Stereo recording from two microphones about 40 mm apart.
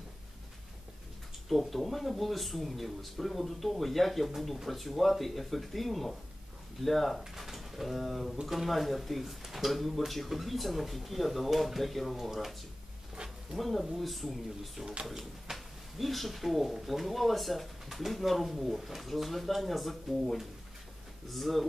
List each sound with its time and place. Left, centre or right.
1.5 s speech: centre
13.1 s a sound: right
13.6 s speech: centre